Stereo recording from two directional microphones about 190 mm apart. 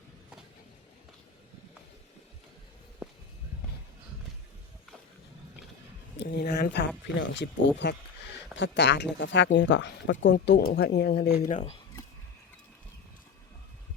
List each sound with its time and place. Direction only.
6.1 s speech: 60° left (ahead or behind)
10.3 s speech: 60° left (ahead or behind); by 11.8 s 40° left (ahead or behind)